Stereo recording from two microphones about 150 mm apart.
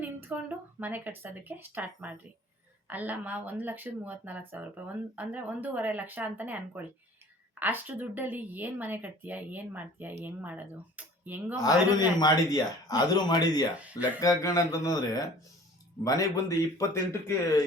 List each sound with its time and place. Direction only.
0.0 s speech: 10° right (ahead or behind)
11.5 s speech: 25° left (ahead or behind)